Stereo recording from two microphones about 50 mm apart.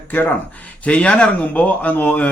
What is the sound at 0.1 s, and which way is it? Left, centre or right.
Speech, left.